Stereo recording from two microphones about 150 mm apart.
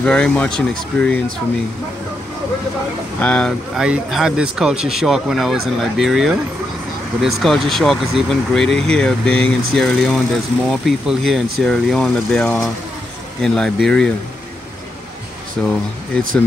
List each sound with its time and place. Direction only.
0.0 s speech: 5° left (ahead or behind)
3.2 s speech: 10° left (ahead or behind)
3.7 s speech: 5° right (ahead or behind)
15.6 s speech: 5° left (ahead or behind)